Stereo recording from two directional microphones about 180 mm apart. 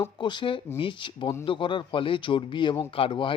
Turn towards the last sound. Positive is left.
turn(degrees=30)  # may be behind; listen again after turning